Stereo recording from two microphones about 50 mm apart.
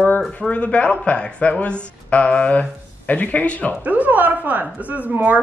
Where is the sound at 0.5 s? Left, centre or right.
Left.